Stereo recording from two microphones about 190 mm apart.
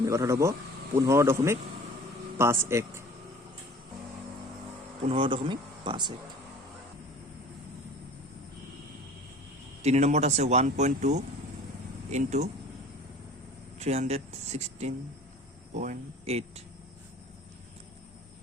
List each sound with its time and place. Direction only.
0.0 s speech: 15° right (ahead or behind)
5.0 s speech: 30° right (ahead or behind)
9.8 s speech: 35° right (ahead or behind)
13.7 s speech: 35° right (ahead or behind)